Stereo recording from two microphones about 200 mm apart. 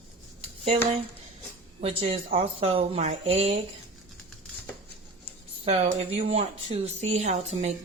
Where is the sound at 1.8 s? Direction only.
30° right (ahead or behind).